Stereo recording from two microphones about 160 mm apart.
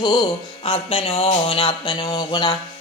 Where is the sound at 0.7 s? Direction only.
35° left (ahead or behind).